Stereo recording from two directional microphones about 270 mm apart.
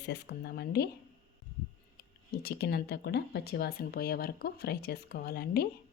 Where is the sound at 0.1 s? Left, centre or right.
Left.